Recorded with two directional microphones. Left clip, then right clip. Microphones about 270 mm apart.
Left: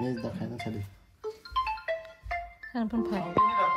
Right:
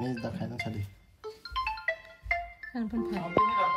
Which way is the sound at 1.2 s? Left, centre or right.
Centre.